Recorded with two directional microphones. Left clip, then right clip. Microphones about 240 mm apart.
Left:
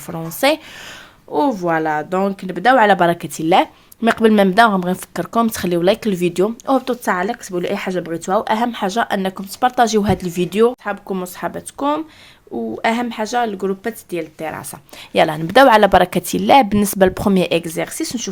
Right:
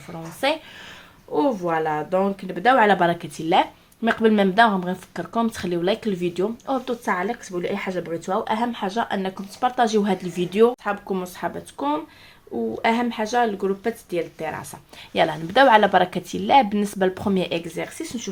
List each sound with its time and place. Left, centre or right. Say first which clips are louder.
0.1 s speech: left 7 dB; left